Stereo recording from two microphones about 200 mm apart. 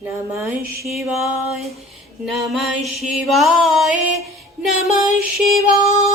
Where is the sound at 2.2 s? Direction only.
Centre (ahead or behind).